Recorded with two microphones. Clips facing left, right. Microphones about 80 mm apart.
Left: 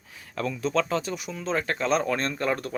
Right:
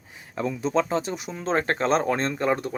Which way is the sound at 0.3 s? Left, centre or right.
Right.